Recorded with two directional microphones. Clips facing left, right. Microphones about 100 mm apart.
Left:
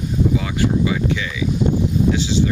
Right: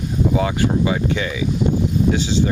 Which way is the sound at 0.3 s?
40° right (ahead or behind).